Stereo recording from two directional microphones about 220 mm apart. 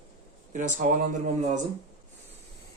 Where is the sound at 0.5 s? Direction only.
35° right (ahead or behind).